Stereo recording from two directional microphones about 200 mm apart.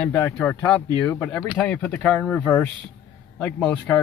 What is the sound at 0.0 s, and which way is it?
Speech, 10° left (ahead or behind).